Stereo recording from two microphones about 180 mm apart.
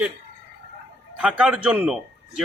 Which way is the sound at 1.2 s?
5° right (ahead or behind).